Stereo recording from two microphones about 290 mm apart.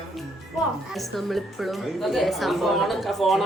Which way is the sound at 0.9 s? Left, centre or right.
Centre.